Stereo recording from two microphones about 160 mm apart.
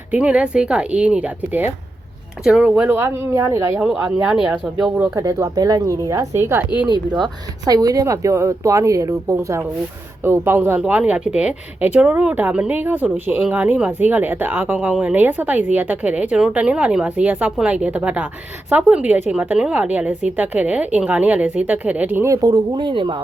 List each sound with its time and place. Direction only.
0.1 s speech: 10° right (ahead or behind)
4.4 s speech: 5° right (ahead or behind)
4.9 s a woman's voice: 15° right (ahead or behind)